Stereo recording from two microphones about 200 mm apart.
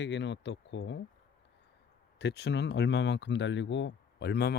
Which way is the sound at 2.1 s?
55° left (ahead or behind).